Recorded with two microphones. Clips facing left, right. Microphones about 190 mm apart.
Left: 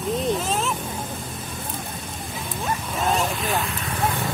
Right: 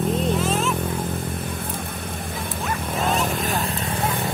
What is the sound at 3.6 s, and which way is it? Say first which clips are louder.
Vehicle: right 3 dB; 35° right (ahead or behind).